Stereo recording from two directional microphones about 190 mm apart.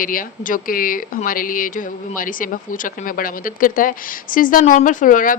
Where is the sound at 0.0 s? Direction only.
45° left (ahead or behind).